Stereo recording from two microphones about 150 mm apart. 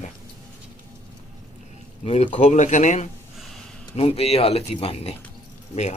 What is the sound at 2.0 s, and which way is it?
Speech, 45° left (ahead or behind).